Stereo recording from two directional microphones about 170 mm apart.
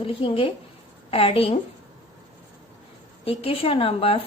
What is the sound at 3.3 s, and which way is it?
Speech, 35° left (ahead or behind).